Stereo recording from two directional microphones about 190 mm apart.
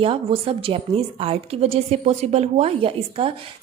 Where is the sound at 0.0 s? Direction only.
30° right (ahead or behind).